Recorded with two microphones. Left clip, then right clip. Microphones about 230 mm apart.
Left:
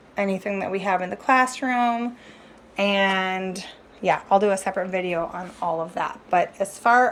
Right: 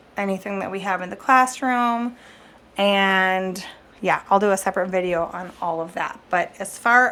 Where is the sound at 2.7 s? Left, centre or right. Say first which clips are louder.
Right 3 dB; right.